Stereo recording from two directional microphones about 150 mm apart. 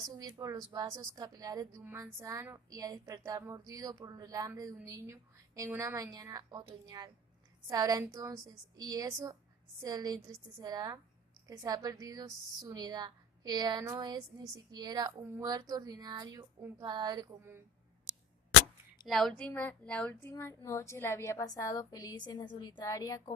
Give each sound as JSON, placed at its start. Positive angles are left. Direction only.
{"t": 0.1, "sound": "a woman's voice", "side_deg": -25}
{"t": 19.0, "sound": "a woman's voice", "side_deg": 0}